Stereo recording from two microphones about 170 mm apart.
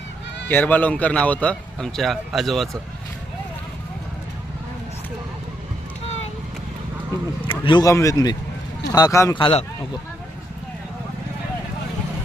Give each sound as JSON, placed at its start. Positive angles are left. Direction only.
{"t": 0.4, "sound": "speech", "side_deg": 10}
{"t": 6.1, "sound": "vehicle", "side_deg": 40}
{"t": 7.4, "sound": "speech", "side_deg": 30}
{"t": 9.3, "sound": "a man's voice", "side_deg": 30}